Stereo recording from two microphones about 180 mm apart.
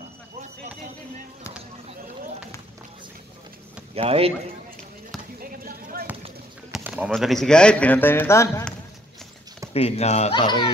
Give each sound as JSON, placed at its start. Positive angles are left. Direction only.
{"t": 3.9, "sound": "speech", "side_deg": -35}
{"t": 5.4, "sound": "basketball bounce", "side_deg": -50}
{"t": 6.7, "sound": "a sound", "side_deg": -5}
{"t": 7.1, "sound": "speech", "side_deg": 0}
{"t": 9.8, "sound": "speech", "side_deg": 35}